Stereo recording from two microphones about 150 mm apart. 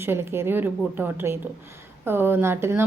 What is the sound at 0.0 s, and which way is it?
Speech, 15° right (ahead or behind).